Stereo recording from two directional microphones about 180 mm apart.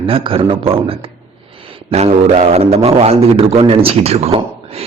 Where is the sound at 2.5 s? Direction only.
35° right (ahead or behind).